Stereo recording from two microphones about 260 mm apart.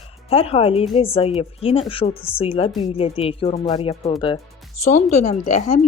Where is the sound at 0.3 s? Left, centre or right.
Left.